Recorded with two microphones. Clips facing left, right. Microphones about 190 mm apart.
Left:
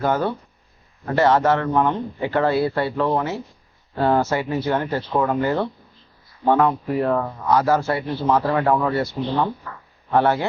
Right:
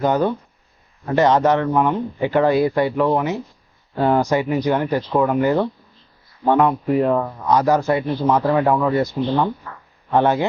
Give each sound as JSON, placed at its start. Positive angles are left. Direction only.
{"t": 0.0, "sound": "speech", "side_deg": -15}
{"t": 6.6, "sound": "speech", "side_deg": -20}